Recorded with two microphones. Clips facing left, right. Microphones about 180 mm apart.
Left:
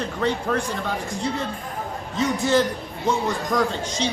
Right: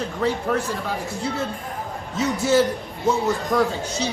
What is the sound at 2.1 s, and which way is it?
Speech, 5° right (ahead or behind).